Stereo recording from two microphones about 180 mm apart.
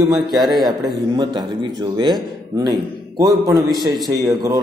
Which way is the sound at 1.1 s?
25° right (ahead or behind).